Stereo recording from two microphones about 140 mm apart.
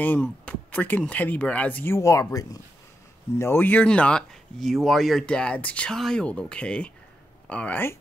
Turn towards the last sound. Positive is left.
turn(degrees=15)  # may be behind; listen again after turning